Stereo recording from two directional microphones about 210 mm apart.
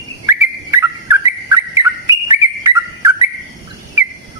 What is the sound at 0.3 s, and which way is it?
Bird, 10° right (ahead or behind).